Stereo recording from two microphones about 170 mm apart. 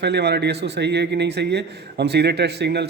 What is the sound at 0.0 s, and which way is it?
A man's voice, 80° right.